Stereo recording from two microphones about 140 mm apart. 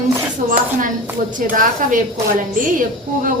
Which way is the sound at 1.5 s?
70° right (ahead or behind).